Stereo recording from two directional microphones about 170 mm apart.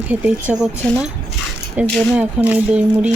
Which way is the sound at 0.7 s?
15° left (ahead or behind).